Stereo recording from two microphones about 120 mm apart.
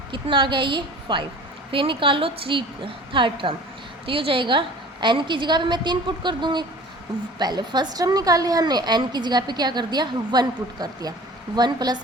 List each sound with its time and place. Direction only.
0.1 s a woman's voice: 45° right (ahead or behind)